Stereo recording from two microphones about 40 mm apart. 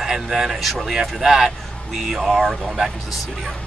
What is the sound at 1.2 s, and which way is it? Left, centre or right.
Speech, centre.